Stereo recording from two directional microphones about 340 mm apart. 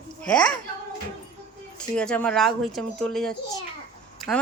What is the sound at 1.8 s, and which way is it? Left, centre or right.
Speech, centre.